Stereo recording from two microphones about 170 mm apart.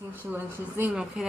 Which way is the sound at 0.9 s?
5° right (ahead or behind).